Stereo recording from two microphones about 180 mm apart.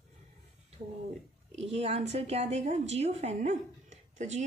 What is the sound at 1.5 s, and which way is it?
A woman's voice, 35° right (ahead or behind).